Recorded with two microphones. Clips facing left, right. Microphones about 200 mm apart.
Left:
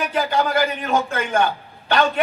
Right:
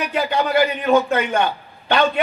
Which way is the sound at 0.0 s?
45° left (ahead or behind).